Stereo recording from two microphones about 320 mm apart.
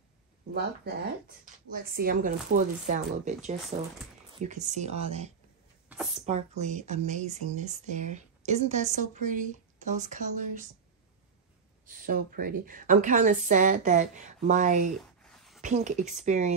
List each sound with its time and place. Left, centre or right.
1.7 s speech: right
5.9 s a sound: centre
6.2 s speech: right
11.8 s speech: right
15.0 s writing: centre
15.6 s speech: right